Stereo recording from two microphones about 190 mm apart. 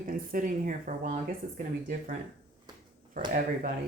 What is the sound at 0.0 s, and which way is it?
Speech, 45° right (ahead or behind).